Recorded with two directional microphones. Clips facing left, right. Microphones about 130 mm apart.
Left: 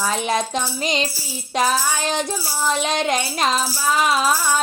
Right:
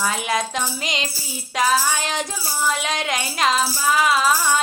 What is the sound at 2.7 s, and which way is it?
Music, 25° left (ahead or behind).